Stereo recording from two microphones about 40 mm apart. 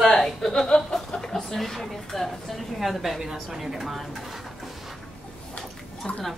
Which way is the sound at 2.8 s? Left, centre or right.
Centre.